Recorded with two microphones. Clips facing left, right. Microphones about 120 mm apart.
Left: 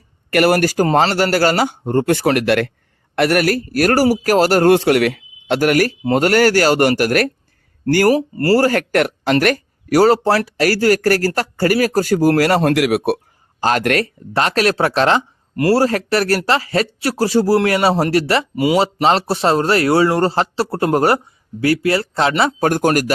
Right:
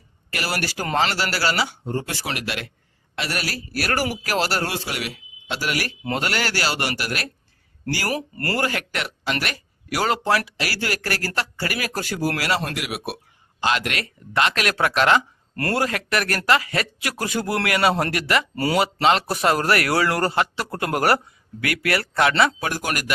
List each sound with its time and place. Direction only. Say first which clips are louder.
0.3 s speech: left 14 dB; 55° left (ahead or behind)
8.1 s speech: left 11 dB; 35° left (ahead or behind)
12.7 s speech: left 14 dB; 60° left (ahead or behind)
13.6 s speech: left 8 dB; 45° left (ahead or behind)
18.5 s speech: left 7 dB; 15° left (ahead or behind)
19.3 s a man's voice: left 5 dB; 30° left (ahead or behind)
22.6 s speech: left 11 dB; 45° left (ahead or behind)